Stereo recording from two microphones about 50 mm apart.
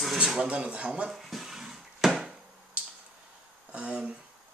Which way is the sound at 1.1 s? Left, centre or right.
Centre.